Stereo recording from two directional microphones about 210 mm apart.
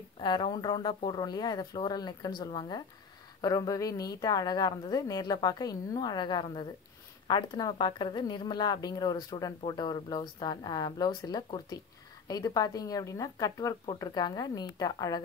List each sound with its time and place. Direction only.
0.2 s speech: 20° left (ahead or behind)